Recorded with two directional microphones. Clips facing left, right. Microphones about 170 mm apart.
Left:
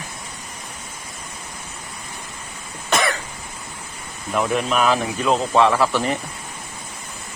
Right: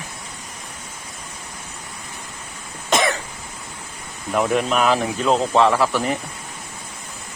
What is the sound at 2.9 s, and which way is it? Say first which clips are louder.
Cough: right 2 dB; 20° right (ahead or behind).